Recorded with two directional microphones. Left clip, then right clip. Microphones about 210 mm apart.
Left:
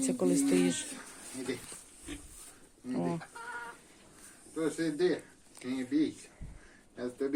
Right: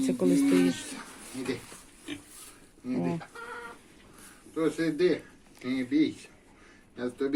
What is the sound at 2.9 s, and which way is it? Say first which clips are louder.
Speech: right 2 dB; 10° left (ahead or behind).